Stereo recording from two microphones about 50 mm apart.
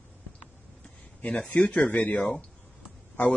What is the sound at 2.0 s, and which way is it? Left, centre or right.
Speech, left.